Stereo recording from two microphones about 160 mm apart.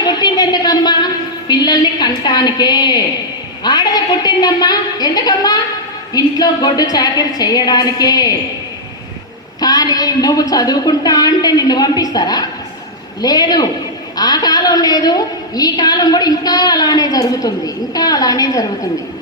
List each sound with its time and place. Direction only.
0.0 s a sound: 25° left (ahead or behind)
1.5 s a woman's voice: 25° left (ahead or behind)
9.6 s a woman's voice: 25° left (ahead or behind)